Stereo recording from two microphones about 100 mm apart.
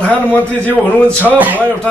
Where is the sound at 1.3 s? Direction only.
15° right (ahead or behind).